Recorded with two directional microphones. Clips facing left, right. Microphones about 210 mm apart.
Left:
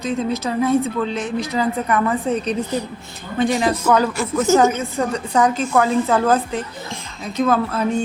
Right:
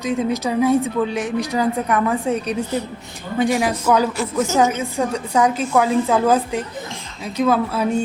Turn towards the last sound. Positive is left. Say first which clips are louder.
# even
turn(degrees=-10)  # may be behind; listen again after turning